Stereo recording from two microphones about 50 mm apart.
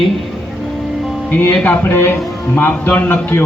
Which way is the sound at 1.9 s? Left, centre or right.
Left.